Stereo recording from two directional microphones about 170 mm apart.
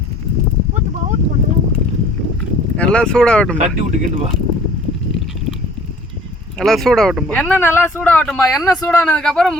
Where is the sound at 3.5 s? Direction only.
45° right (ahead or behind).